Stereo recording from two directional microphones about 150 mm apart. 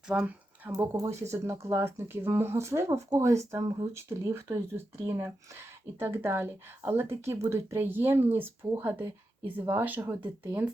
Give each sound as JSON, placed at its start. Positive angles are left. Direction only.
{"t": 0.1, "sound": "speech", "side_deg": -10}
{"t": 0.7, "sound": "speech", "side_deg": -25}
{"t": 6.0, "sound": "speech", "side_deg": -15}